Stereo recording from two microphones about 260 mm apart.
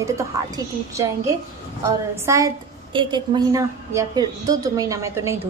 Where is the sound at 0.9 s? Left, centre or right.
Centre.